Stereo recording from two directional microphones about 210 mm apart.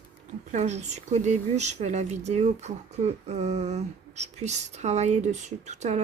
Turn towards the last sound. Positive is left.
turn(degrees=-35)  # may be behind; listen again after turning